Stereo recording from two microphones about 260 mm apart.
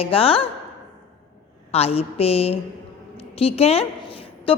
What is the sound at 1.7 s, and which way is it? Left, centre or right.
A woman's voice, left.